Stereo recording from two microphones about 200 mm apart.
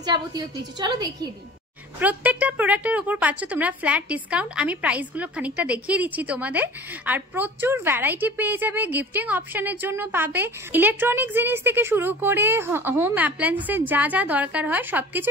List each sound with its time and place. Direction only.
0.0 s a woman's voice: 20° right (ahead or behind)
2.0 s speech: 10° right (ahead or behind)